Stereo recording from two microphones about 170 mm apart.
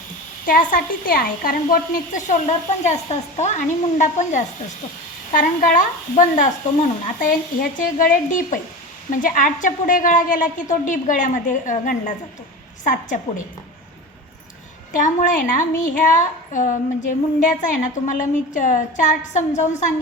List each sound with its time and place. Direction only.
0.4 s a woman's voice: 55° left (ahead or behind)
14.9 s a woman's voice: 50° left (ahead or behind)